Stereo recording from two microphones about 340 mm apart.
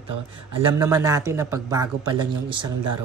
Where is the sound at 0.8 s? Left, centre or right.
Centre.